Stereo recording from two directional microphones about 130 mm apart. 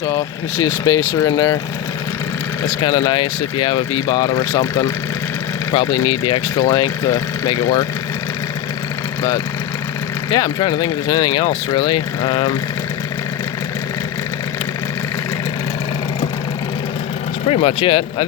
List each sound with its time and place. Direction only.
0.1 s speech: 25° left (ahead or behind)
2.6 s speech: 30° left (ahead or behind)
10.2 s speech: 30° left (ahead or behind)
17.5 s speech: 50° left (ahead or behind)